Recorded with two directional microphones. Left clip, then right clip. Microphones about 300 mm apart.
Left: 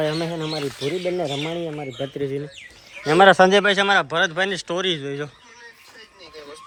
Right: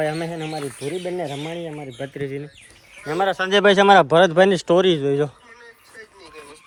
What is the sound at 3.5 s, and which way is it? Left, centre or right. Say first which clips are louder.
Speech: right 4 dB; centre.